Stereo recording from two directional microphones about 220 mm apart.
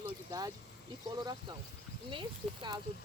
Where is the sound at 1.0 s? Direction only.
20° right (ahead or behind).